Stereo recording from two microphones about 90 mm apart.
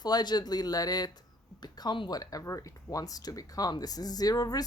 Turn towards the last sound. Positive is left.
turn(degrees=45)  # may be behind; listen again after turning